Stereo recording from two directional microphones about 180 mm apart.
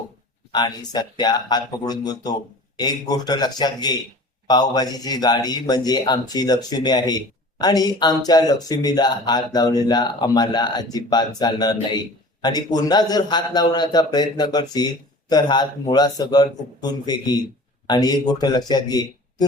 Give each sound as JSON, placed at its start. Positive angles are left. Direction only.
{"t": 0.5, "sound": "a man's voice", "side_deg": 20}